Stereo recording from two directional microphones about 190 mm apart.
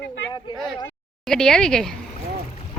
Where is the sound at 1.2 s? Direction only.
5° left (ahead or behind).